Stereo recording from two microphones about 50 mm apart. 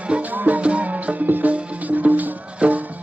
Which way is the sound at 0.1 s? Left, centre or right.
Right.